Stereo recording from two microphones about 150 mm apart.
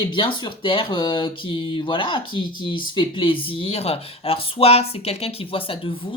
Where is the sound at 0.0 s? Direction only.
35° left (ahead or behind).